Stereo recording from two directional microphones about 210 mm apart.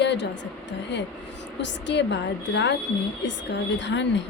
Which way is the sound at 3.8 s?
55° left (ahead or behind).